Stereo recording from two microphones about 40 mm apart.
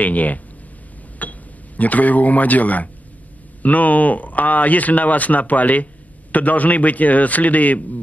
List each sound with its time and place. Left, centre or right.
0.0 s speech: left
1.2 s a sound: left
1.8 s speech: left